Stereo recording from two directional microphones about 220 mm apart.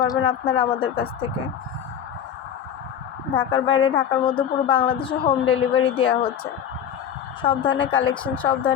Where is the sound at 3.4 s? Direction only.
25° left (ahead or behind).